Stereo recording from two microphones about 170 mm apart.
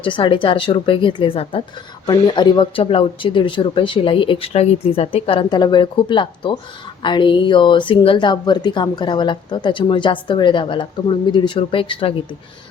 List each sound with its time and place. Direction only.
0.0 s a woman's voice: 30° left (ahead or behind)